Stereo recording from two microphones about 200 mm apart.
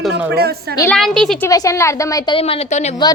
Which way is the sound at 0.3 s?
50° right (ahead or behind).